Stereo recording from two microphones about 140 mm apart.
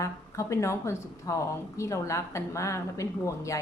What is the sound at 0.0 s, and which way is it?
Speech, 20° left (ahead or behind).